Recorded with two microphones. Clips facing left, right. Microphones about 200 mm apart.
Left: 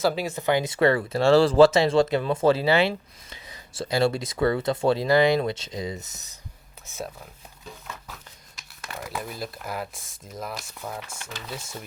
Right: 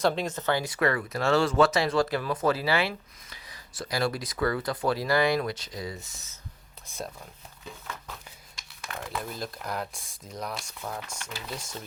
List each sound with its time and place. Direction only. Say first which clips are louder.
0.0 s speech: left 2 dB; 5° left (ahead or behind); by 6.1 s 20° left (ahead or behind)
8.5 s speech: left 1 dB; 5° left (ahead or behind)